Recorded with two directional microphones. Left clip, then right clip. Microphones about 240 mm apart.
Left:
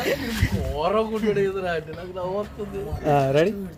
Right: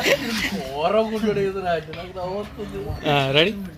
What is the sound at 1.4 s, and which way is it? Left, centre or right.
Speech, centre.